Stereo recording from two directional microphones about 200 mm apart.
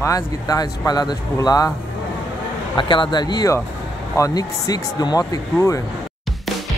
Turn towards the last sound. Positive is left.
turn(degrees=15)  # may be behind; listen again after turning